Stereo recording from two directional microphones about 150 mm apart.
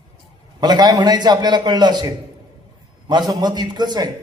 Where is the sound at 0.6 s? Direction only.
25° right (ahead or behind).